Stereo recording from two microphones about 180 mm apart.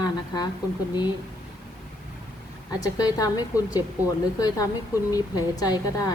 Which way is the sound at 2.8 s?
20° left (ahead or behind).